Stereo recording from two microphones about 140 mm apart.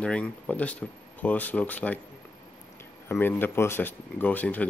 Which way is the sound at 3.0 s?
15° left (ahead or behind).